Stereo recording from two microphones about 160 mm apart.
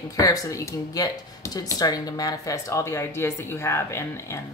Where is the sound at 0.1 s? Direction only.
20° left (ahead or behind).